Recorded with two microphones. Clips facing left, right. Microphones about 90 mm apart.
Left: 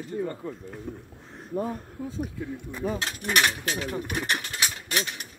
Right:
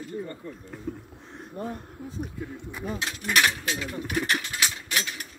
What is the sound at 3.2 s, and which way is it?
Speech, 35° left (ahead or behind).